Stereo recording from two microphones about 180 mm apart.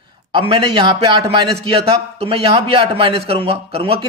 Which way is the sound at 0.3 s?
30° right (ahead or behind).